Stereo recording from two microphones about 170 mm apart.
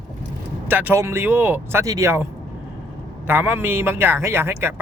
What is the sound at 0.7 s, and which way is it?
A woman's voice, 10° right (ahead or behind).